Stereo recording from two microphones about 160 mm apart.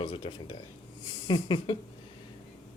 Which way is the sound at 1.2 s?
30° left (ahead or behind).